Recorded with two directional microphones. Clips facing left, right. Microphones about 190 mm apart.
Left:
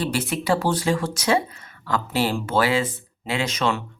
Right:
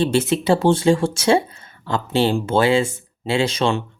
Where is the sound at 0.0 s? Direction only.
25° right (ahead or behind).